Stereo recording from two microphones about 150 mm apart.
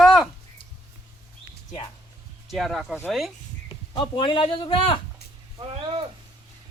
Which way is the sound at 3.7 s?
35° left (ahead or behind).